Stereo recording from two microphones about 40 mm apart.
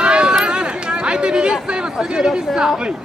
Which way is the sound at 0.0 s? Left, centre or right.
Right.